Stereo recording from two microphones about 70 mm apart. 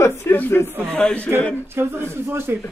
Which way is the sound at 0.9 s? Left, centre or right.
Centre.